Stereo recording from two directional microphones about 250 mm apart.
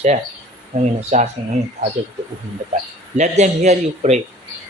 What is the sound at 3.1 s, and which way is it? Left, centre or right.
Speech, right.